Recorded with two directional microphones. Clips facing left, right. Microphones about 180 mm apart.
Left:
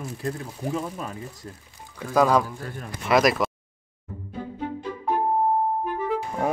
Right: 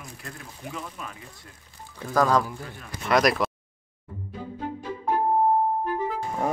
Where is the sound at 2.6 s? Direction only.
45° left (ahead or behind).